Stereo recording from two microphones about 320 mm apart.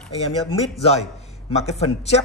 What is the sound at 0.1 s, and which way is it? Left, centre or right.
Speech, centre.